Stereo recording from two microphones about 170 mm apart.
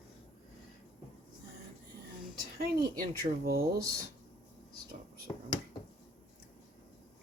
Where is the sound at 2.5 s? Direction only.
60° right (ahead or behind).